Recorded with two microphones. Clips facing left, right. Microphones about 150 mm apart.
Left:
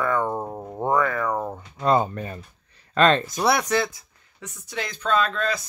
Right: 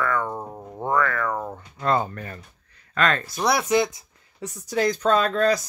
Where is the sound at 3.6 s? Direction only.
15° right (ahead or behind).